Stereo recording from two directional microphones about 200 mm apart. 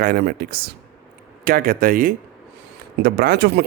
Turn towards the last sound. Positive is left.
turn(degrees=-55)  # may be behind; listen again after turning